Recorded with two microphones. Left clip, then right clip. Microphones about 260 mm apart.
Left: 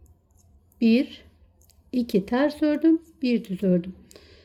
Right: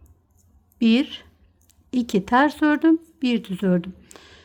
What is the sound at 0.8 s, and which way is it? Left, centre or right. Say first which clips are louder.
Speech: right 2 dB; right.